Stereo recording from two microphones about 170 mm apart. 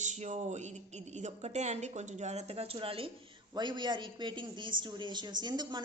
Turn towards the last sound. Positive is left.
turn(degrees=-25)  # may be behind; listen again after turning